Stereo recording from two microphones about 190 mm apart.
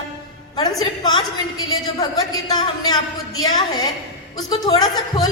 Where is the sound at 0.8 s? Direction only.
20° left (ahead or behind).